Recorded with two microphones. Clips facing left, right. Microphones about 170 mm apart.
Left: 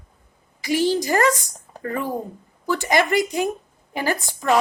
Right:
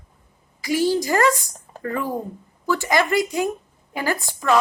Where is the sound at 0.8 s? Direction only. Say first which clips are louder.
Even; 20° left (ahead or behind).